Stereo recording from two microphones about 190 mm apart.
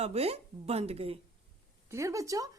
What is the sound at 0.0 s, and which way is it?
A woman's voice, 30° right (ahead or behind).